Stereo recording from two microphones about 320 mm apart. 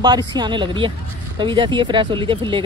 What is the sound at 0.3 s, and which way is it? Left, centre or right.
Speech, centre.